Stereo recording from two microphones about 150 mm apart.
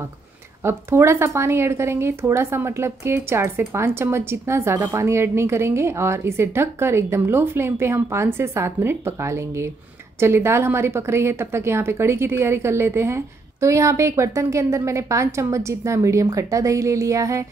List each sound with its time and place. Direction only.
0.7 s a woman's voice: 15° right (ahead or behind)